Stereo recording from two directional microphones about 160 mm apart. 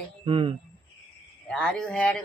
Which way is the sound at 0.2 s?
35° right (ahead or behind).